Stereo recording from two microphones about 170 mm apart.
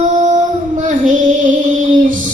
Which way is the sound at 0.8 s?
50° right (ahead or behind).